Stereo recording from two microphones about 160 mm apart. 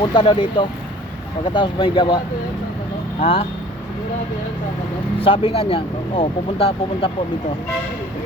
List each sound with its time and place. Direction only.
0.0 s speech: 30° left (ahead or behind)
5.2 s speech: 35° left (ahead or behind)